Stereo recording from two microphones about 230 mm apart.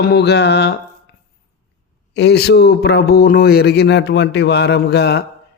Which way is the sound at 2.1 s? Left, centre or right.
Left.